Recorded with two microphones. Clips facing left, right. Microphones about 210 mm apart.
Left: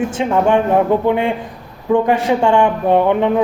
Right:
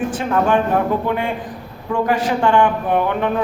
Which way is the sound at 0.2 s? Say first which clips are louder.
Left 3 dB; 25° left (ahead or behind).